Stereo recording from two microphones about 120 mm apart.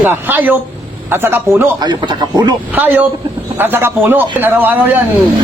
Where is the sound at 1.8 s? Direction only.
35° right (ahead or behind).